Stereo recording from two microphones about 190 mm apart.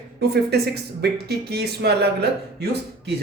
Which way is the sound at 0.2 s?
55° right (ahead or behind).